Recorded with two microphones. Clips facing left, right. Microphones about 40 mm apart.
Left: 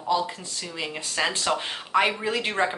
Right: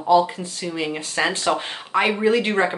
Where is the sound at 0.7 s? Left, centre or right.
Centre.